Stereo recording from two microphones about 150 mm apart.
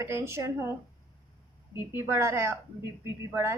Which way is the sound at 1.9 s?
15° right (ahead or behind).